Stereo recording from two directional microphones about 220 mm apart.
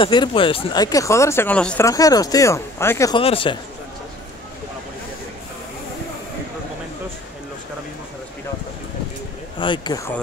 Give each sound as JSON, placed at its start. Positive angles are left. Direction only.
{"t": 0.0, "sound": "speech", "side_deg": 20}
{"t": 3.2, "sound": "speech", "side_deg": 25}
{"t": 9.6, "sound": "speech", "side_deg": 20}